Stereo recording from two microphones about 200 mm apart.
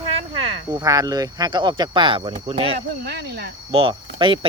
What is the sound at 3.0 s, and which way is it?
Speech, 55° right (ahead or behind).